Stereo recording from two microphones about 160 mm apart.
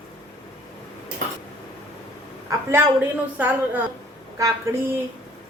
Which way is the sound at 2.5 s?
20° right (ahead or behind).